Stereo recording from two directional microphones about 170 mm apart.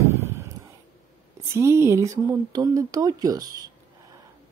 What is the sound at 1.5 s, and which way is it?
A man's voice, 15° right (ahead or behind).